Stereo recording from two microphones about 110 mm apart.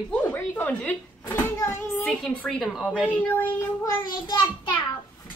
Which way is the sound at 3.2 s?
15° left (ahead or behind).